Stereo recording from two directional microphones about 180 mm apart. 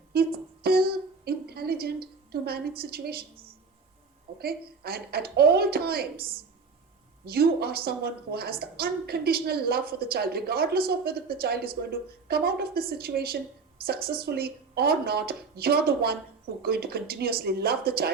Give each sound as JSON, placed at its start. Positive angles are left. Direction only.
{"t": 0.1, "sound": "a sound", "side_deg": -60}
{"t": 4.4, "sound": "a woman's voice", "side_deg": -60}
{"t": 7.3, "sound": "a woman's voice", "side_deg": -60}